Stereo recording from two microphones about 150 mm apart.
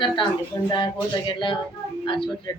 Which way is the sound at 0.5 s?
20° left (ahead or behind).